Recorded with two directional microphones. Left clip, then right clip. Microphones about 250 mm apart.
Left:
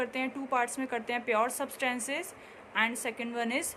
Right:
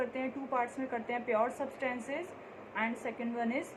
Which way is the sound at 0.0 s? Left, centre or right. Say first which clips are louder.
Left 3 dB; left.